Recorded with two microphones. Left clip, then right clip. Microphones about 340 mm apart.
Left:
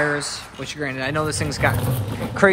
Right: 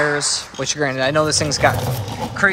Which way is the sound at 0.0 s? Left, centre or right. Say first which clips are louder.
Right 4 dB; centre.